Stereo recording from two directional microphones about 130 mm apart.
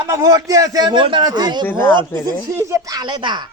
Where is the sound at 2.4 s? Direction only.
25° right (ahead or behind).